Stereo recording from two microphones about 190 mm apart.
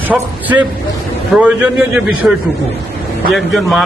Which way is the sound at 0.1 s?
10° right (ahead or behind).